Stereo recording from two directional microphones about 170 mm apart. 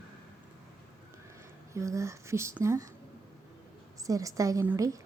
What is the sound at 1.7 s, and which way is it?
A woman's voice, 20° right (ahead or behind).